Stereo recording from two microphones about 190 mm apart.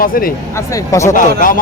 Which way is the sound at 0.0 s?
50° left (ahead or behind).